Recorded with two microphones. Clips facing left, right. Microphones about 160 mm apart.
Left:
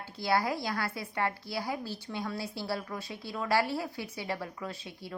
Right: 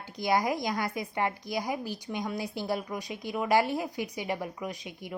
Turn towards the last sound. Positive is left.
turn(degrees=-15)  # may be behind; listen again after turning